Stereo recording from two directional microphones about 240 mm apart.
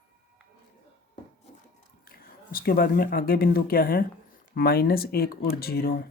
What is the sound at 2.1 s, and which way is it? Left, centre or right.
Speech, left.